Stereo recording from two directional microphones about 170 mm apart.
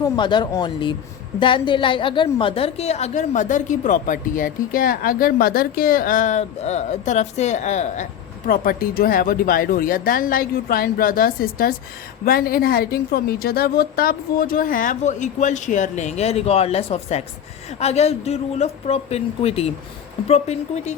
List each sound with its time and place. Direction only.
0.0 s a woman's voice: 25° left (ahead or behind); by 8.0 s 45° left (ahead or behind)
8.4 s a woman's voice: 60° left (ahead or behind); by 20.9 s 40° left (ahead or behind)